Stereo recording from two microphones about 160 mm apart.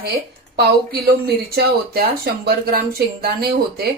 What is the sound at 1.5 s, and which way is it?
Speech, 75° right (ahead or behind).